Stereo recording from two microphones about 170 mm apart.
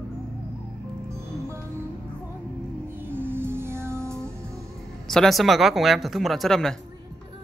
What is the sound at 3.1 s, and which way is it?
Music, 10° right (ahead or behind).